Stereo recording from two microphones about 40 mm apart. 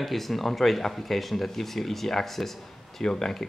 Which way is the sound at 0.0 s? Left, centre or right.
Centre.